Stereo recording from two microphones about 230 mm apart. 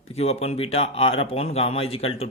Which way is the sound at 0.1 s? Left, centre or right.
Left.